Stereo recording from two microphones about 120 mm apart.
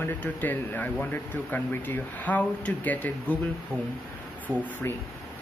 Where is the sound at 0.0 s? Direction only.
15° left (ahead or behind).